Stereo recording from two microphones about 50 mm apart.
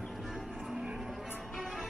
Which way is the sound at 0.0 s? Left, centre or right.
Centre.